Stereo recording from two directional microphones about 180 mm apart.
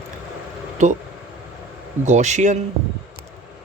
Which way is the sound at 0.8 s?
45° right (ahead or behind).